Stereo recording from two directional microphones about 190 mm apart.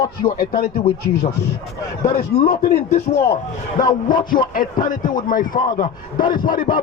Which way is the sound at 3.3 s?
40° left (ahead or behind).